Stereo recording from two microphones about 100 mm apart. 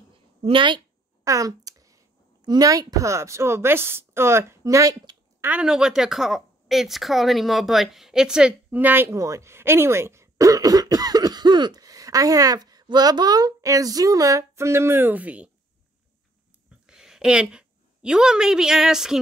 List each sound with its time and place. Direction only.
0.4 s speech: 55° right (ahead or behind)
1.2 s a sound: 35° right (ahead or behind)
2.4 s a woman's voice: 40° right (ahead or behind)
5.4 s speech: 15° right (ahead or behind)
16.8 s a woman's voice: 5° right (ahead or behind)